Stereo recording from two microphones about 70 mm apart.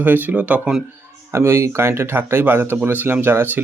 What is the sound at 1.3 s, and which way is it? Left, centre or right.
Speech, right.